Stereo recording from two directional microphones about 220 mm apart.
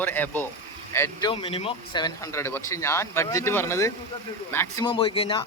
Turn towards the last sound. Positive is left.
turn(degrees=25)  # may be behind; listen again after turning